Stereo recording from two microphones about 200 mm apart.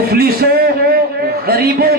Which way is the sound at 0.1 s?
50° right (ahead or behind).